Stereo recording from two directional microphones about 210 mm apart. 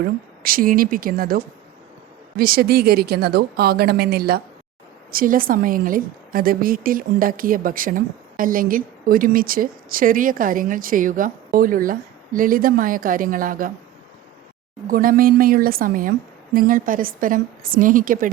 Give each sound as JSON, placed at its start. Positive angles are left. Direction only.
{"t": 0.0, "sound": "a woman's voice", "side_deg": -45}
{"t": 14.8, "sound": "a woman's voice", "side_deg": -40}